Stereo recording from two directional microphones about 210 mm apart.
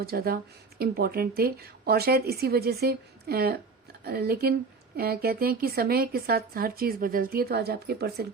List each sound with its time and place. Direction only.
0.0 s a woman's voice: 45° right (ahead or behind)